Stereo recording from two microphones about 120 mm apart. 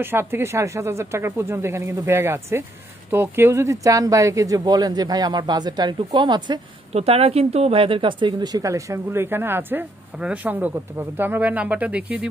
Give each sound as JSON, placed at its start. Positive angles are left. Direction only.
{"t": 0.0, "sound": "speech", "side_deg": -20}
{"t": 6.9, "sound": "speech", "side_deg": -60}